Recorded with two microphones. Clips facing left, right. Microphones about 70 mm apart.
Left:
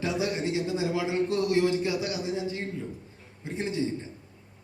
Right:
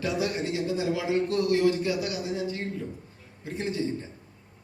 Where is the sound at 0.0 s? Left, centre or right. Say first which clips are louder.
Even; left.